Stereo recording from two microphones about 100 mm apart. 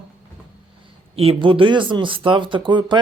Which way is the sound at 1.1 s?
75° right (ahead or behind).